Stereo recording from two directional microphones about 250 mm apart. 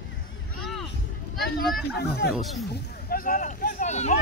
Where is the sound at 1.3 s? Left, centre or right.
Left.